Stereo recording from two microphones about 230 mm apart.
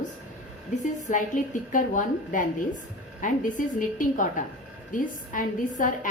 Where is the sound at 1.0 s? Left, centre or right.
Left.